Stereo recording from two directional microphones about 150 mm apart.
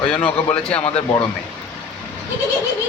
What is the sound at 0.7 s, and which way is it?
Speech, 45° left (ahead or behind).